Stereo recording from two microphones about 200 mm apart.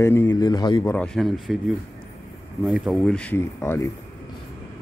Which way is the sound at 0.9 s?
5° left (ahead or behind).